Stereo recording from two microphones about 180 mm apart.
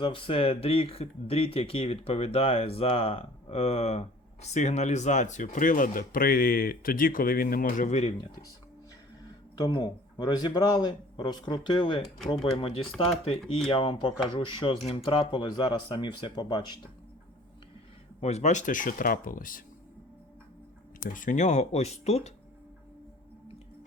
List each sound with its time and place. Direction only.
0.0 s speech: 30° left (ahead or behind)
9.8 s speech: 25° left (ahead or behind)
18.2 s speech: 35° left (ahead or behind)
21.1 s speech: 45° left (ahead or behind)